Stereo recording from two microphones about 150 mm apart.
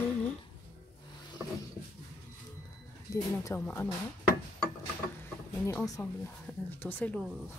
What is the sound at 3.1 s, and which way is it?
Speech, 15° left (ahead or behind).